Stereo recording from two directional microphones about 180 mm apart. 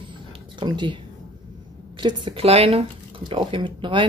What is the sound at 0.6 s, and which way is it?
Speech, 25° right (ahead or behind).